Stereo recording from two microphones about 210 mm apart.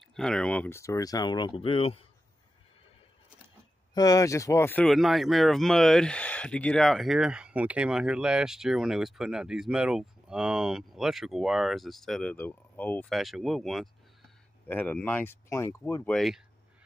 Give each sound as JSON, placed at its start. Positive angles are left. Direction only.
{"t": 0.1, "sound": "speech", "side_deg": 5}
{"t": 3.9, "sound": "speech", "side_deg": 15}